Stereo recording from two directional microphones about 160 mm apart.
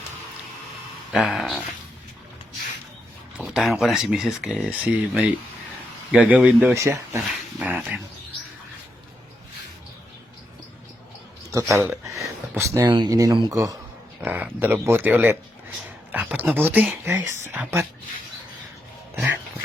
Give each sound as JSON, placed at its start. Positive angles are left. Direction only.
{"t": 1.1, "sound": "speech", "side_deg": 0}
{"t": 3.3, "sound": "speech", "side_deg": -5}
{"t": 6.8, "sound": "speech", "side_deg": -20}
{"t": 7.6, "sound": "speech", "side_deg": -10}
{"t": 11.5, "sound": "speech", "side_deg": -10}